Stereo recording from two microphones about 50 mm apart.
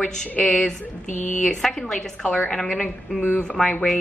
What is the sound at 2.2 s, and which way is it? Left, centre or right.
A woman's voice, left.